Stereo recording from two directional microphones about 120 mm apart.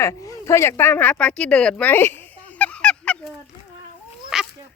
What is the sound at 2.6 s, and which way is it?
Honk, 10° left (ahead or behind).